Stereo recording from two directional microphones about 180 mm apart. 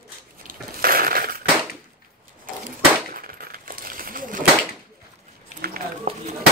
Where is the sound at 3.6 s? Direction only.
50° right (ahead or behind).